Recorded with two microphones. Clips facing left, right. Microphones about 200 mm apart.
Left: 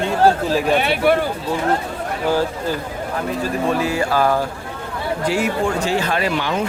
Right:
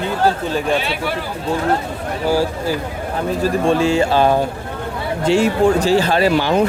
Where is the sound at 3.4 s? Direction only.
30° right (ahead or behind).